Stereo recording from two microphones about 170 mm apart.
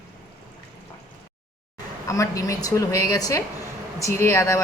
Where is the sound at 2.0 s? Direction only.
20° left (ahead or behind).